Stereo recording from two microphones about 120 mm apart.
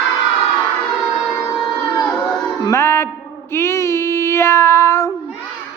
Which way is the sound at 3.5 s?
20° left (ahead or behind).